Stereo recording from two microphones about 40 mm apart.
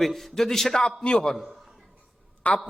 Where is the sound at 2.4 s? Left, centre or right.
Left.